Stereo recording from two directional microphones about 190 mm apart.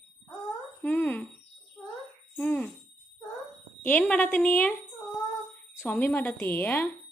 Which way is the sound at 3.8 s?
5° left (ahead or behind).